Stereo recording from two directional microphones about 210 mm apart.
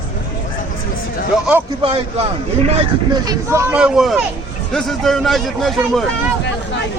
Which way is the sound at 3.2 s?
15° right (ahead or behind).